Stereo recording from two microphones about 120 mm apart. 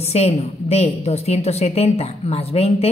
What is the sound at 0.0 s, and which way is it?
A woman's voice, 60° left (ahead or behind).